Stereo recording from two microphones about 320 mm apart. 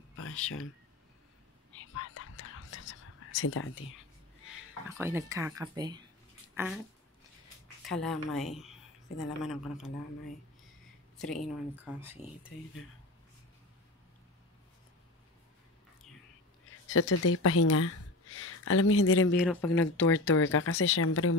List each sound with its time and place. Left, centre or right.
0.1 s a sound: left
2.0 s whispering: left
4.5 s speech: centre
7.8 s speech: centre
11.4 s speech: centre
16.9 s speech: left
19.3 s speech: centre
19.8 s speech: left